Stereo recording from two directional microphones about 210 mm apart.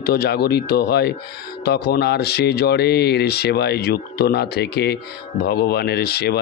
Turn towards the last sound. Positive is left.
turn(degrees=50)  # may be behind; listen again after turning